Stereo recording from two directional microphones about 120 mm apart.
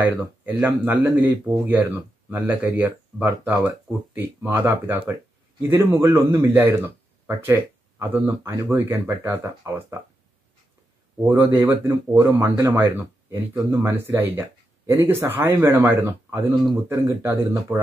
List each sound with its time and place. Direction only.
0.5 s speech: 15° right (ahead or behind)
11.2 s speech: 15° right (ahead or behind)